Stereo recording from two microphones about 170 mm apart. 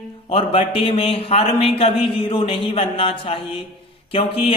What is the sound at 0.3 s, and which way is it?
Speech, 35° left (ahead or behind).